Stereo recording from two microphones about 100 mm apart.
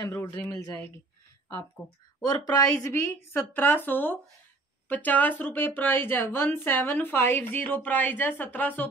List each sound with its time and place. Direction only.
0.0 s speech: 25° left (ahead or behind)
1.8 s speech: centre (ahead or behind)
2.2 s speech: 40° left (ahead or behind); by 8.8 s 15° left (ahead or behind)